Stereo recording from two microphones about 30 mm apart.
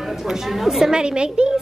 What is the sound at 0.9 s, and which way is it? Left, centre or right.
Speech, right.